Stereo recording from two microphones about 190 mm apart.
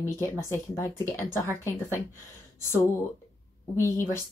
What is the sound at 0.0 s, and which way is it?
Speech, 15° left (ahead or behind).